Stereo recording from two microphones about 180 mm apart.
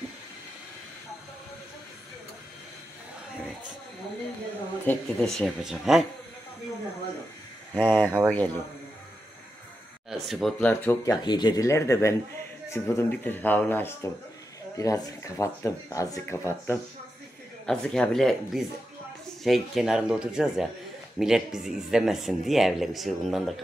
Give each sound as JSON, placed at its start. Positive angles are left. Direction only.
{"t": 4.8, "sound": "speech", "side_deg": 5}
{"t": 7.7, "sound": "speech", "side_deg": 10}
{"t": 8.0, "sound": "speech", "side_deg": -10}
{"t": 10.0, "sound": "speech", "side_deg": 0}
{"t": 11.2, "sound": "speech", "side_deg": 25}
{"t": 17.6, "sound": "speech", "side_deg": 5}